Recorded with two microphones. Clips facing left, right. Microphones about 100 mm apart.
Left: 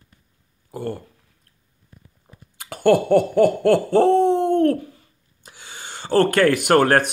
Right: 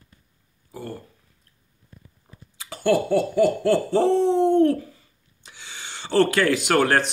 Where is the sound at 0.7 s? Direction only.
65° left (ahead or behind).